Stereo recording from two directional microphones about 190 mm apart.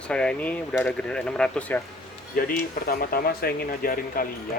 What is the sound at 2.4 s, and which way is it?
Speech, 50° left (ahead or behind).